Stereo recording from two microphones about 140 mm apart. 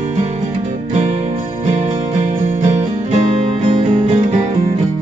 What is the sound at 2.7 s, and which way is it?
Music, 50° right (ahead or behind).